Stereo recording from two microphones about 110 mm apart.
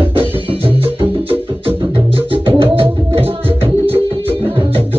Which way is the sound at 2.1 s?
55° right (ahead or behind).